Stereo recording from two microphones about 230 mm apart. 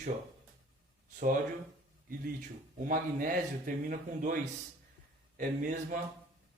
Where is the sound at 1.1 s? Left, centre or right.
Right.